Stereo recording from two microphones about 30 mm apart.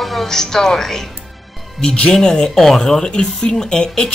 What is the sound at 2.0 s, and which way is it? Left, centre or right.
Speech, centre.